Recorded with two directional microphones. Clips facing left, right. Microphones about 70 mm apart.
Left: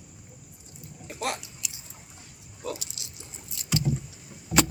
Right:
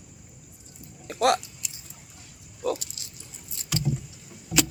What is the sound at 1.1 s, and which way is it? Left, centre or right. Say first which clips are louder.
Chewing: right 10 dB; right.